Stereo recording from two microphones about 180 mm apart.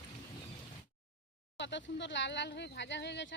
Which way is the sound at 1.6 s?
80° left.